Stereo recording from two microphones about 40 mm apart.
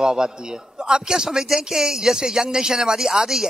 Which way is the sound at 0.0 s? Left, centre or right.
Centre.